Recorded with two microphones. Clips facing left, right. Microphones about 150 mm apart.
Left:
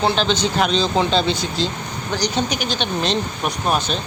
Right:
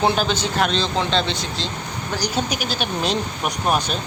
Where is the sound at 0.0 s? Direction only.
5° right (ahead or behind).